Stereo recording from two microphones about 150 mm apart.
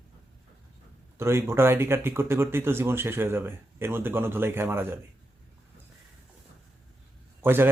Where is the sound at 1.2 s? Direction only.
15° right (ahead or behind).